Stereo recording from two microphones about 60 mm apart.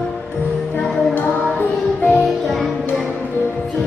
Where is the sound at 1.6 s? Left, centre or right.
Left.